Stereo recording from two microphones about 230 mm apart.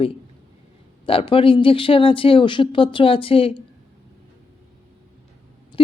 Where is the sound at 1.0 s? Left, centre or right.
Left.